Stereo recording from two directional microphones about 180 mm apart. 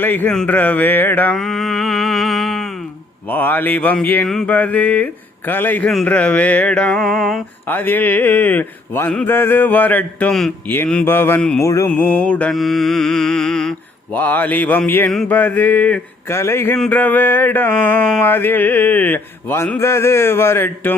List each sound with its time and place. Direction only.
0.0 s mantra: 10° left (ahead or behind)
11.6 s mantra: 15° left (ahead or behind)